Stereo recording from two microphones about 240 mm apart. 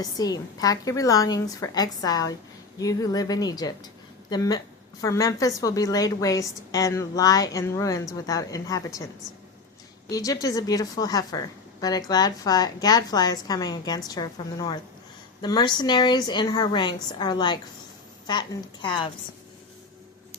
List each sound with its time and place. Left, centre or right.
0.0 s a woman's voice: centre
10.1 s a woman's voice: centre